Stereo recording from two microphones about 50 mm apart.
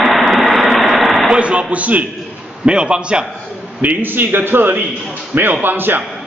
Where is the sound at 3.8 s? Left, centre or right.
Right.